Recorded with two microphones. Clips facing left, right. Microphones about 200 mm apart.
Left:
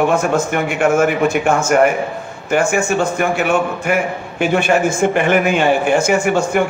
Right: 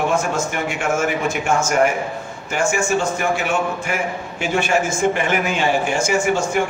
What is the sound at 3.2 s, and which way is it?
Speech, 55° left (ahead or behind).